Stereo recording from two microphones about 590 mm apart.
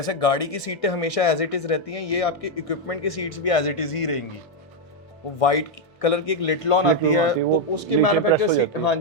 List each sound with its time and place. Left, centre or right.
0.0 s speech: left
5.4 s speech: left